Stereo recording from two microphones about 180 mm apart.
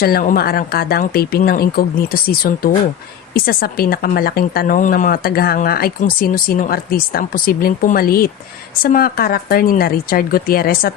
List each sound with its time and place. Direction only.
0.0 s a woman's voice: 55° left (ahead or behind)